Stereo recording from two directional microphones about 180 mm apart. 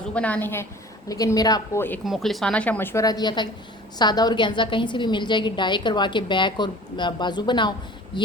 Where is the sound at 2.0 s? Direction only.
Centre (ahead or behind).